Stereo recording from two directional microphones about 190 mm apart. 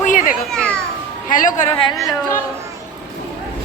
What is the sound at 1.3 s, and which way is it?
Speech, 45° left (ahead or behind).